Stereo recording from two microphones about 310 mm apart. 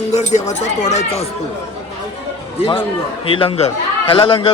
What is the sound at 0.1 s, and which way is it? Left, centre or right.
Speech, left.